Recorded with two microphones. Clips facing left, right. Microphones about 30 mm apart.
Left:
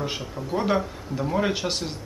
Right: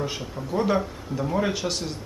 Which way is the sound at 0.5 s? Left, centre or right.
Centre.